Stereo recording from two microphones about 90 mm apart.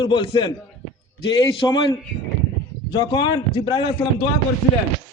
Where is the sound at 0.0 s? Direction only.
65° left (ahead or behind).